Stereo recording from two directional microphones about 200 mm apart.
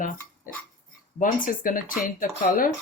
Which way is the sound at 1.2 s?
45° left (ahead or behind).